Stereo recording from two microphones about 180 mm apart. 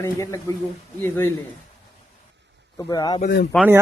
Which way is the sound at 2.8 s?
20° left (ahead or behind).